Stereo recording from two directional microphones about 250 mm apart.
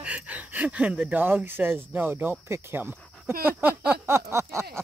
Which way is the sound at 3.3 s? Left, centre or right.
Right.